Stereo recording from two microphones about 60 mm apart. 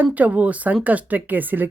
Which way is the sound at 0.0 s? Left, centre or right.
Right.